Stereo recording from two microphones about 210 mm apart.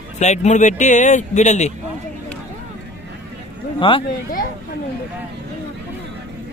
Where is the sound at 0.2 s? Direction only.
35° left (ahead or behind).